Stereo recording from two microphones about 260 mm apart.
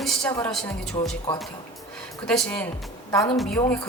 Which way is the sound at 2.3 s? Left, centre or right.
Centre.